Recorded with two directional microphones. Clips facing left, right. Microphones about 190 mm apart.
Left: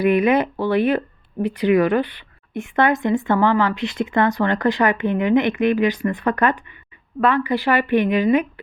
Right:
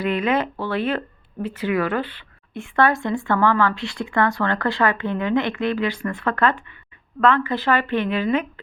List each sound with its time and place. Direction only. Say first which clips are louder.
0.0 s speech: left 5 dB; 15° left (ahead or behind)